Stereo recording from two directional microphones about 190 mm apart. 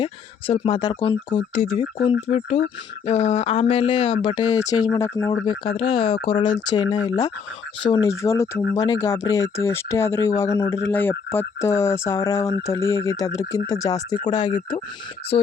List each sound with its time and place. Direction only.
0.0 s speech: 30° left (ahead or behind)
1.5 s speech: 40° left (ahead or behind)